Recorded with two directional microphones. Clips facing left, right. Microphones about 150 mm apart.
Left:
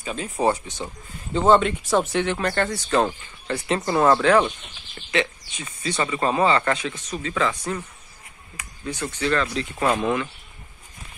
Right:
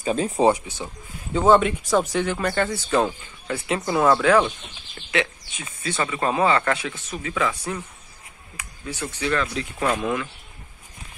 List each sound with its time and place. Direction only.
0.0 s speech: 35° right (ahead or behind)
1.3 s speech: 5° right (ahead or behind)
6.9 s speech: 15° left (ahead or behind)
7.2 s speech: 10° right (ahead or behind)